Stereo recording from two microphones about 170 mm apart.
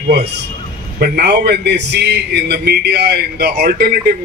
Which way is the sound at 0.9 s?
65° right (ahead or behind).